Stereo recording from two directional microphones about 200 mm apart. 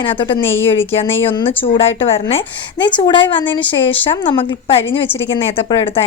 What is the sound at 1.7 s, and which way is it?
A woman's voice, 30° left (ahead or behind).